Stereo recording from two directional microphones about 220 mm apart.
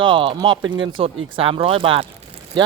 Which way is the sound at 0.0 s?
25° right (ahead or behind).